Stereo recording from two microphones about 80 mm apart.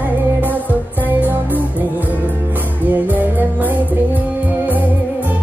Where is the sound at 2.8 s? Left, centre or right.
Right.